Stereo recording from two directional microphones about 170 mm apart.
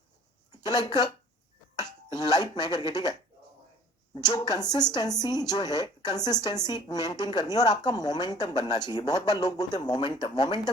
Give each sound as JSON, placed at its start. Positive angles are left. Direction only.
{"t": 0.6, "sound": "a woman's voice", "side_deg": 25}
{"t": 2.1, "sound": "a woman's voice", "side_deg": 25}